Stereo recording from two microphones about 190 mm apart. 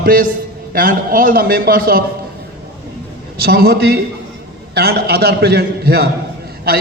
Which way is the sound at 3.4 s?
55° right (ahead or behind).